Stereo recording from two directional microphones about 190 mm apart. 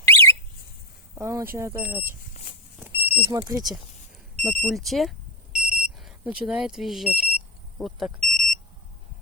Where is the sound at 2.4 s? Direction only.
40° left (ahead or behind).